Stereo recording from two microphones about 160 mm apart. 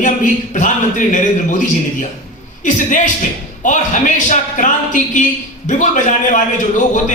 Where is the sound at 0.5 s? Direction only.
50° left (ahead or behind).